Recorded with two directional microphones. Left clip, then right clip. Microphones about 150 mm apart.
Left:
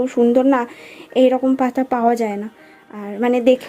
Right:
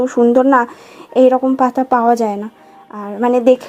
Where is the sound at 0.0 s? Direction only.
Centre (ahead or behind).